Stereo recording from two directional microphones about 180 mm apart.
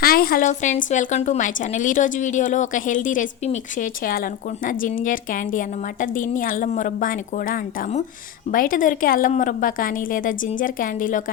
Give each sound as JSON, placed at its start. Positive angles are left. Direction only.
{"t": 0.0, "sound": "a woman's voice", "side_deg": 55}